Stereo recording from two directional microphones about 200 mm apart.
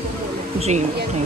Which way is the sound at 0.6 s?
35° right (ahead or behind).